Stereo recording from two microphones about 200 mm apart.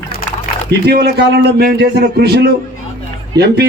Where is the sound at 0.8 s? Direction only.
55° right (ahead or behind).